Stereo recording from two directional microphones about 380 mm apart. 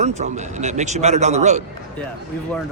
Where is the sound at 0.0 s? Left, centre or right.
Centre.